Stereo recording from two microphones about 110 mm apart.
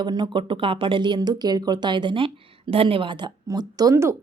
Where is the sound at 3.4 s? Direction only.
35° right (ahead or behind).